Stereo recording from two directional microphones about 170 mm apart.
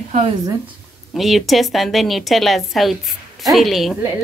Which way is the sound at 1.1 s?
Centre (ahead or behind).